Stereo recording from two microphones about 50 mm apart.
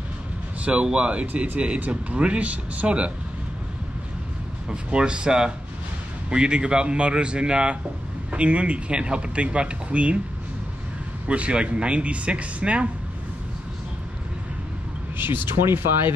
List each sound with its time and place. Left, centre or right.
0.6 s speech: right
1.2 s speech: right
4.6 s speech: centre
11.2 s speech: right
15.1 s speech: right